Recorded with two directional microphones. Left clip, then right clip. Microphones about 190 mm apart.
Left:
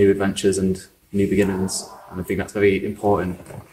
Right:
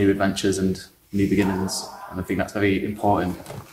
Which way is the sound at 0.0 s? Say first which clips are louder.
Left 3 dB; 15° right (ahead or behind).